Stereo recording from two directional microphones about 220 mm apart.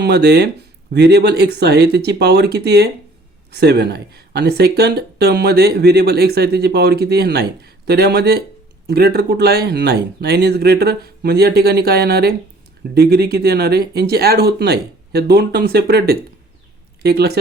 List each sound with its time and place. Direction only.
0.0 s speech: 50° right (ahead or behind)